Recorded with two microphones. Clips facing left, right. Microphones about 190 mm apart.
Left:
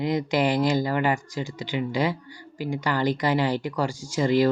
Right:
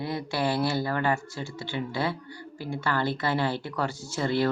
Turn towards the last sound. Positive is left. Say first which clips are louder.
# left 5 dB
turn(degrees=15)  # may be behind; listen again after turning